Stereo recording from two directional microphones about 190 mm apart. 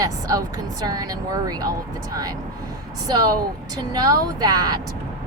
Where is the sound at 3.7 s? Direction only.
20° right (ahead or behind).